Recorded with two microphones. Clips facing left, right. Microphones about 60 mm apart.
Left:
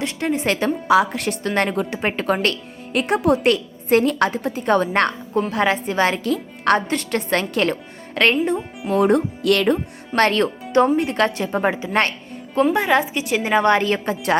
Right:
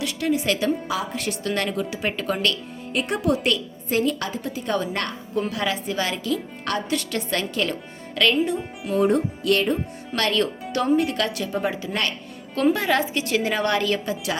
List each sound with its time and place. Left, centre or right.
0.0 s speech: left
0.9 s a woman's voice: left
1.5 s a woman's voice: left
2.9 s a woman's voice: left
9.0 s music: left
10.2 s speech: left
10.7 s speech: left
12.7 s a woman's voice: left